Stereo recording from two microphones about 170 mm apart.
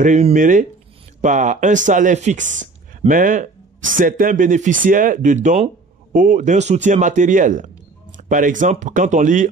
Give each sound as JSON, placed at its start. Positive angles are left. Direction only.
{"t": 0.0, "sound": "a man's voice", "side_deg": -45}